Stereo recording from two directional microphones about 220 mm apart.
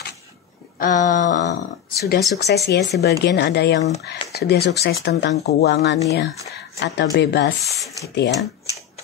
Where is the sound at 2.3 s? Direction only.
50° left (ahead or behind).